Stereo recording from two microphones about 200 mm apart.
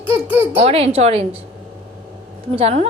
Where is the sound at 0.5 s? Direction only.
30° right (ahead or behind).